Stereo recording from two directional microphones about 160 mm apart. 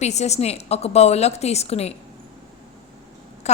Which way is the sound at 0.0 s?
45° left (ahead or behind).